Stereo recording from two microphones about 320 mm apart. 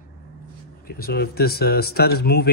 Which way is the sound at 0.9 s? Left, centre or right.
Left.